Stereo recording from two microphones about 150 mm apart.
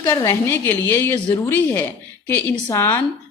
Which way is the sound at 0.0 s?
20° left (ahead or behind).